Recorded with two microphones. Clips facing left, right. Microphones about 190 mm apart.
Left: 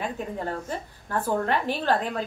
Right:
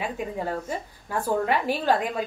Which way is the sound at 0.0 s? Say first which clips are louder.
Right 1 dB; 10° right (ahead or behind).